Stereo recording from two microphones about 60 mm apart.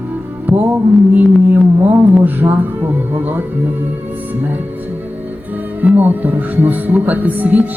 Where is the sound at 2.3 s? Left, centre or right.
Right.